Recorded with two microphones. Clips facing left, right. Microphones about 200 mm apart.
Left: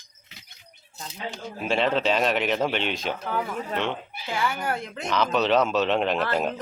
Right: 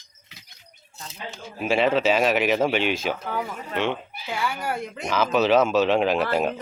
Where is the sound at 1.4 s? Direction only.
5° right (ahead or behind).